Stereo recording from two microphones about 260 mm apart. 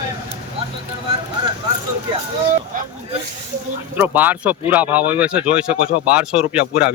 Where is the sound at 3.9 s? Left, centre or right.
Centre.